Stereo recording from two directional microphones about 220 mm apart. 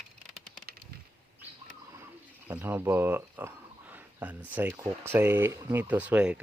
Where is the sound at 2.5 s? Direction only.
10° right (ahead or behind).